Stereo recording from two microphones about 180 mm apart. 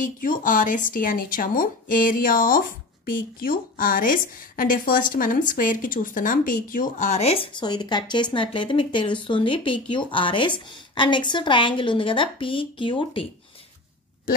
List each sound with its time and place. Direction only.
0.0 s a woman's voice: 50° left (ahead or behind); by 13.3 s 30° left (ahead or behind)